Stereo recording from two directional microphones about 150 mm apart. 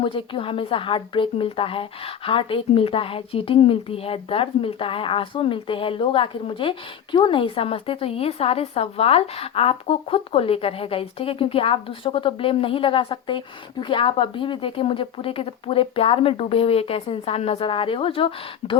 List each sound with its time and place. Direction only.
0.0 s speech: 35° left (ahead or behind)